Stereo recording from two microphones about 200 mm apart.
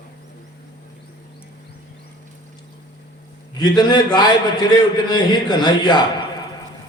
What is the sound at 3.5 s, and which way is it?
A man's voice, 20° left (ahead or behind).